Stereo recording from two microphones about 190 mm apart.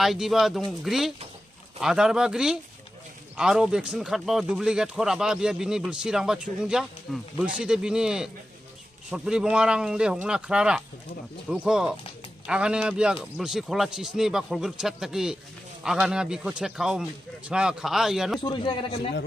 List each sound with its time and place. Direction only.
0.0 s speech: centre (ahead or behind)
18.4 s a man's voice: 25° left (ahead or behind)